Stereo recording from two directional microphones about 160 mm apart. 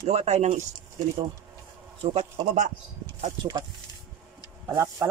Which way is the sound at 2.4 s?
55° right (ahead or behind).